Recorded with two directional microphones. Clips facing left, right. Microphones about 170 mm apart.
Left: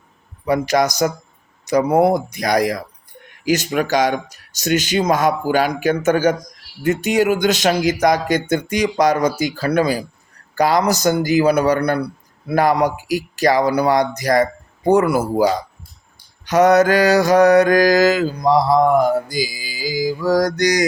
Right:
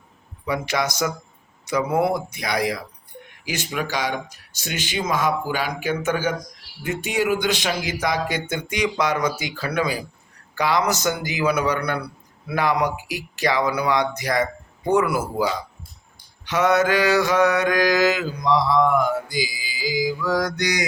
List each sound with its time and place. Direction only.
0.4 s mantra: 40° left (ahead or behind)
3.4 s speech: 40° left (ahead or behind)
6.8 s mantra: 45° left (ahead or behind)